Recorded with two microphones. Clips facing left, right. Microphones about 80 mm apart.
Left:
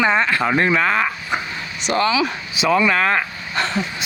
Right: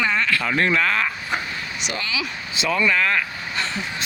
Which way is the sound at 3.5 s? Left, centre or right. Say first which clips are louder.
Left 6 dB; left.